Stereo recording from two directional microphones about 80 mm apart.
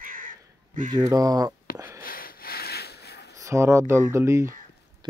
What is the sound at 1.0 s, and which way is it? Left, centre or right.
Speech, right.